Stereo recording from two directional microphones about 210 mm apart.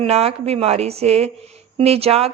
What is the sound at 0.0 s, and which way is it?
A woman's voice, 30° right (ahead or behind).